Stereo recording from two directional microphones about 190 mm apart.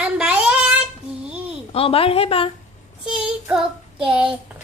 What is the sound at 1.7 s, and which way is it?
Speech, 30° left (ahead or behind).